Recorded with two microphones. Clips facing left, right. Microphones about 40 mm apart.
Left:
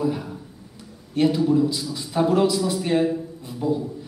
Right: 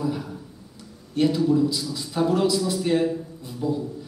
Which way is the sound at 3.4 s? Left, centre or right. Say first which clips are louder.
Left 2 dB; left.